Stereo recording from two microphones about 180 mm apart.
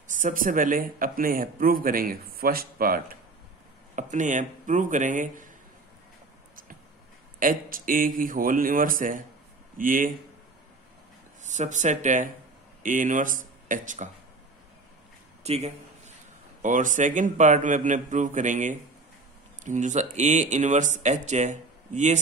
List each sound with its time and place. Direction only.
0.1 s speech: 50° right (ahead or behind)
7.3 s speech: 50° right (ahead or behind)
11.4 s speech: 40° right (ahead or behind)
15.4 s a sound: 35° right (ahead or behind)
16.6 s speech: 45° right (ahead or behind)